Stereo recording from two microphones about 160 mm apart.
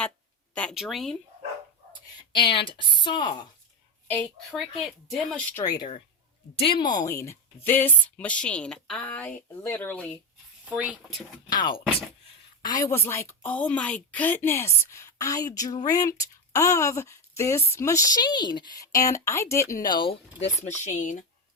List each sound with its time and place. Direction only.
0.5 s speech: 5° left (ahead or behind)
2.3 s a woman's voice: 30° left (ahead or behind)
4.1 s a woman's voice: 5° left (ahead or behind)
5.5 s a woman's voice: 25° left (ahead or behind); by 10.2 s 10° left (ahead or behind)
10.7 s speech: 10° right (ahead or behind)
11.4 s a woman's voice: 25° left (ahead or behind)
20.8 s speech: 50° left (ahead or behind)